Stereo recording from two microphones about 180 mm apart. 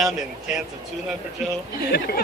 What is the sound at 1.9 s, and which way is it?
Speech, 55° left (ahead or behind).